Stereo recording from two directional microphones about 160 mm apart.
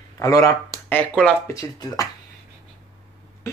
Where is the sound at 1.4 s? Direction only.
20° left (ahead or behind).